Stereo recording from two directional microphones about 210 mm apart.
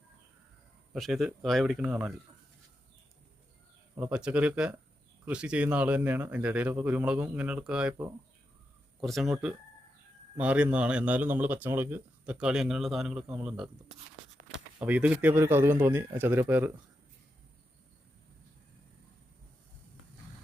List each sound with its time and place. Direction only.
0.9 s speech: centre (ahead or behind)
3.9 s speech: 5° right (ahead or behind)